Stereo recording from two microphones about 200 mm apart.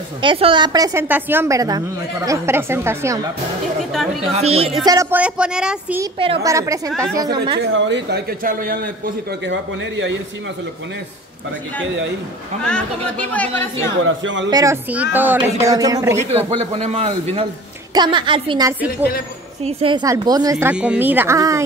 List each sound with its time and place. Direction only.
0.2 s speech: 25° right (ahead or behind)
3.9 s speech: centre (ahead or behind)
4.3 s a man's voice: 30° right (ahead or behind)
4.8 s speech: 20° right (ahead or behind)
5.2 s speech: 5° right (ahead or behind)
6.1 s a woman's voice: 30° right (ahead or behind)
6.4 s speech: 15° right (ahead or behind)
7.7 s a man's voice: 60° right (ahead or behind)
9.5 s a man's voice: 70° right (ahead or behind)
12.6 s speech: 5° left (ahead or behind)
14.0 s a man's voice: 70° right (ahead or behind)
14.5 s speech: 15° right (ahead or behind)
16.2 s a man's voice: 30° right (ahead or behind); by 21.6 s 15° right (ahead or behind)